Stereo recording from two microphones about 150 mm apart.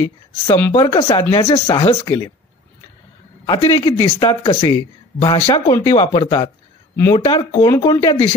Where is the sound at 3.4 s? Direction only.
30° left (ahead or behind).